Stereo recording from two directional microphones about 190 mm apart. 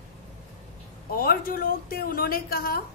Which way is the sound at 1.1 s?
50° left (ahead or behind).